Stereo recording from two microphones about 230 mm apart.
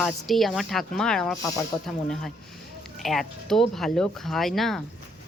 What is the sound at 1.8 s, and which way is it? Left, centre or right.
Speech, centre.